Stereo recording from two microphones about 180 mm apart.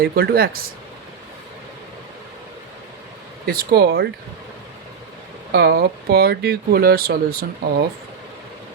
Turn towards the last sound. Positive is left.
turn(degrees=-55)  # may be behind; listen again after turning